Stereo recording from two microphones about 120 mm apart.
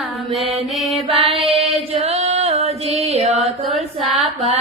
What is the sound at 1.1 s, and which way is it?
Female singing, 50° right (ahead or behind).